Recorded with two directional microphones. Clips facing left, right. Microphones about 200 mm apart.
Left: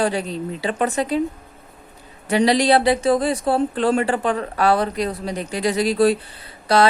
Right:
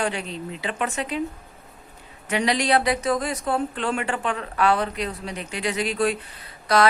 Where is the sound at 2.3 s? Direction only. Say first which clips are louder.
Left 6 dB; 35° left (ahead or behind).